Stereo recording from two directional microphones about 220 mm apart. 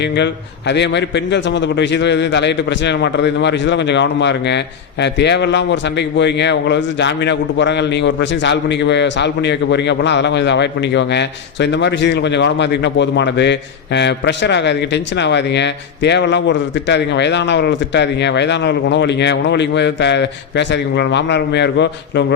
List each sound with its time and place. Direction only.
0.7 s a man's voice: 50° left (ahead or behind)